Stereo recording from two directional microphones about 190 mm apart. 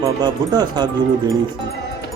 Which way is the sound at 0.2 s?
20° right (ahead or behind).